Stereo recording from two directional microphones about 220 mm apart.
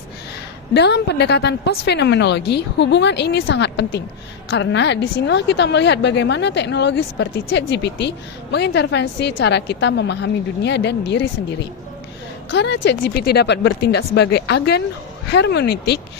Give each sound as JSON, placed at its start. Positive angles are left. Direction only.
{"t": 0.7, "sound": "a woman's voice", "side_deg": 50}
{"t": 12.5, "sound": "a woman's voice", "side_deg": 50}